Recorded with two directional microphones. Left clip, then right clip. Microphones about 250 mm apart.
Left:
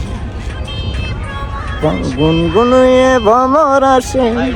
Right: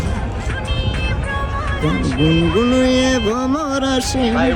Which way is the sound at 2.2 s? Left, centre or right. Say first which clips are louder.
Left 5 dB; centre.